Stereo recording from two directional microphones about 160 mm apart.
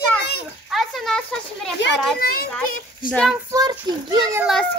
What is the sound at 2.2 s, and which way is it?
Children playing, 70° left (ahead or behind).